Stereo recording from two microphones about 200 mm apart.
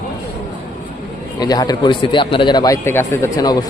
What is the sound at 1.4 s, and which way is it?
A man's voice, 20° left (ahead or behind).